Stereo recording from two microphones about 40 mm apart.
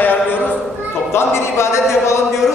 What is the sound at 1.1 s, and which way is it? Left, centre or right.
Speech, left.